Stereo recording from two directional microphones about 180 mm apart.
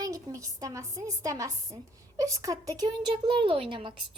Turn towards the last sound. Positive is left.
turn(degrees=-30)  # may be behind; listen again after turning